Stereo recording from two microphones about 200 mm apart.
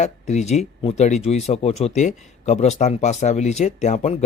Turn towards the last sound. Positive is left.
turn(degrees=35)  # may be behind; listen again after turning